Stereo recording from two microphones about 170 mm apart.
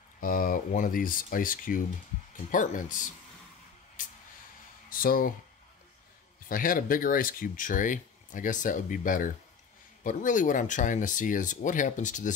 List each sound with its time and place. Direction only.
0.2 s speech: 55° left (ahead or behind)
4.0 s a sound: 50° left (ahead or behind)
6.5 s speech: 55° left (ahead or behind)